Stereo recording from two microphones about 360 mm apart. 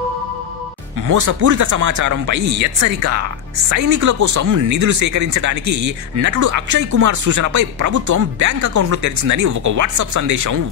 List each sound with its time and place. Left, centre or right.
1.0 s speech: right